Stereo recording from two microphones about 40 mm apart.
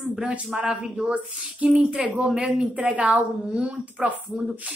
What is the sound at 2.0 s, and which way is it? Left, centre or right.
A woman's voice, centre.